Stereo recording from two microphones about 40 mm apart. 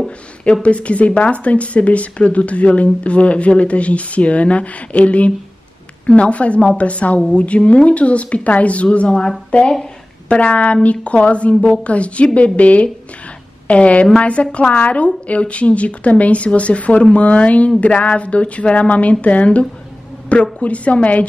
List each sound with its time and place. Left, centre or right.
0.5 s speech: left
7.2 s a woman's voice: left
7.4 s speech: left